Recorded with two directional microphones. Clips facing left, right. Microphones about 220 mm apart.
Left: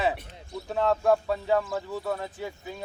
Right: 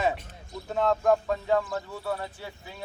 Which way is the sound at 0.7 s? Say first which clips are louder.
Even; 5° left (ahead or behind).